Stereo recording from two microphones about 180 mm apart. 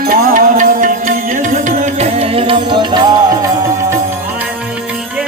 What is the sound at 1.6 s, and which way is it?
Music, 35° right (ahead or behind).